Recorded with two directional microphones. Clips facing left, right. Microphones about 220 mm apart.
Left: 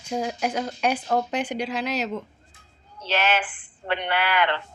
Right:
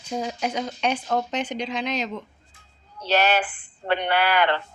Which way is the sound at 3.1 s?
40° right (ahead or behind).